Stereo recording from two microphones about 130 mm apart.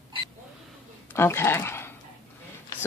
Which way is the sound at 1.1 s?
20° left (ahead or behind).